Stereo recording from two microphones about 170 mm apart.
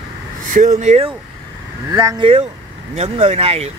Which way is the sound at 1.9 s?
20° right (ahead or behind).